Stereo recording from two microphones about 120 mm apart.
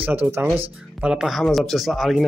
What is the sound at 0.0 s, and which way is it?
Speech, 15° right (ahead or behind).